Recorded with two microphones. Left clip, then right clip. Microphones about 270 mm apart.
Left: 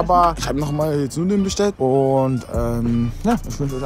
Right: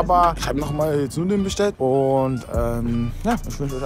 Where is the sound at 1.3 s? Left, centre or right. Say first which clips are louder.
Left 2 dB; centre.